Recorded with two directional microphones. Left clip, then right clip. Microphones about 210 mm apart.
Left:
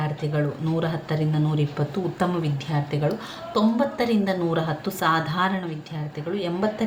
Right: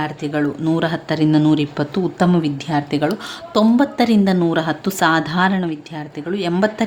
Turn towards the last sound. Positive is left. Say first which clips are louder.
# right 7 dB
turn(degrees=-50)  # may be behind; listen again after turning